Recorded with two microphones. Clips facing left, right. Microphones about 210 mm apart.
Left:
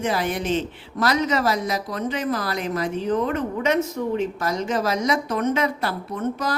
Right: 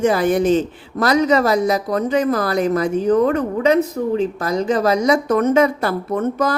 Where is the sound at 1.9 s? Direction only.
50° right (ahead or behind).